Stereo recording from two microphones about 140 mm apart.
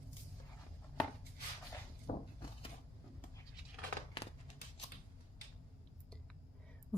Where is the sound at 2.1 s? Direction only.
50° left (ahead or behind).